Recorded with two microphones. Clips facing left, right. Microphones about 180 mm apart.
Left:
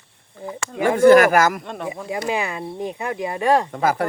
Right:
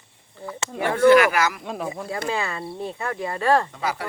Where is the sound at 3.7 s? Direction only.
50° left (ahead or behind).